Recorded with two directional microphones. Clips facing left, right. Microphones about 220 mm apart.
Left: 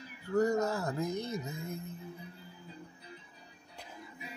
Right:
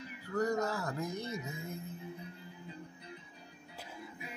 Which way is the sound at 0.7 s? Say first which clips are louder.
Left 3 dB; 25° left (ahead or behind).